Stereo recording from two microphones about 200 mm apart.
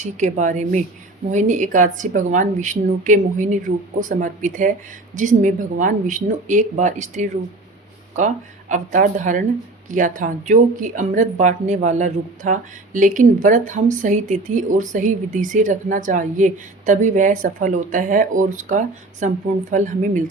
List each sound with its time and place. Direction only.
0.0 s speech: 35° right (ahead or behind)
8.7 s speech: 40° right (ahead or behind)